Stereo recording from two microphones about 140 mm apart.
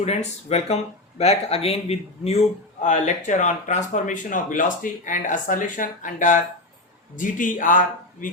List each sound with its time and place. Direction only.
0.0 s speech: 50° left (ahead or behind)
2.8 s speech: 60° left (ahead or behind)